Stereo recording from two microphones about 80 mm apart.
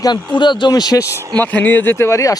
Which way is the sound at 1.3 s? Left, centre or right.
Left.